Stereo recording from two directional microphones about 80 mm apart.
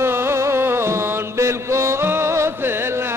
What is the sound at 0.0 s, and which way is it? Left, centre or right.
Music, right.